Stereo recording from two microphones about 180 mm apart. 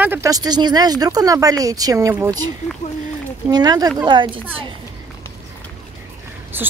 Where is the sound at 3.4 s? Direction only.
20° right (ahead or behind).